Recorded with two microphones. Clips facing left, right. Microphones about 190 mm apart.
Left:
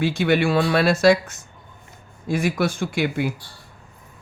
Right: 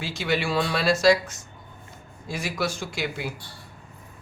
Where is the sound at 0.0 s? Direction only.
55° left (ahead or behind).